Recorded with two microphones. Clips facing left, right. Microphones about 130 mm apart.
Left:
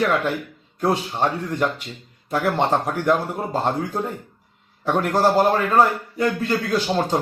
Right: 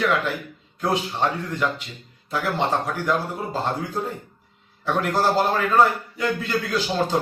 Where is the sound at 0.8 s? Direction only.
50° left (ahead or behind).